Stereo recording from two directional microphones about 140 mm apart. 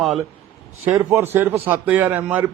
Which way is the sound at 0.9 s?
20° right (ahead or behind).